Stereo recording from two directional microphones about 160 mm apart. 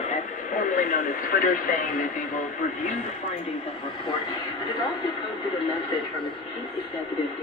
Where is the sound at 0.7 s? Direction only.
55° left (ahead or behind).